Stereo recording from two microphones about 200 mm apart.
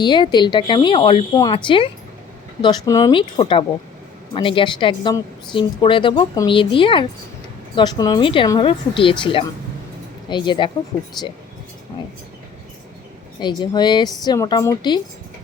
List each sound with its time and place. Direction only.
0.0 s speech: 20° left (ahead or behind)
13.4 s speech: 20° left (ahead or behind)